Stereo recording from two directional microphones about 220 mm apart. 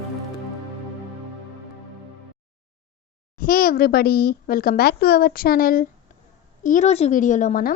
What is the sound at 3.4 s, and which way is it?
A woman's voice, 40° left (ahead or behind).